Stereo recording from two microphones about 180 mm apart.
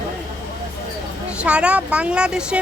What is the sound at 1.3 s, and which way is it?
Speech, 5° right (ahead or behind).